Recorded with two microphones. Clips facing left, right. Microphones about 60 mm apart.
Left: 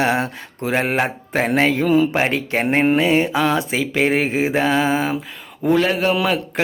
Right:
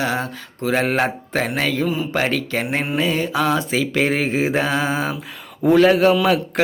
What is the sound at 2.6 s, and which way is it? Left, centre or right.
Speech, left.